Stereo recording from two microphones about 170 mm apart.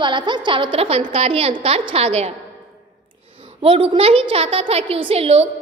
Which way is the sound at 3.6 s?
30° right (ahead or behind).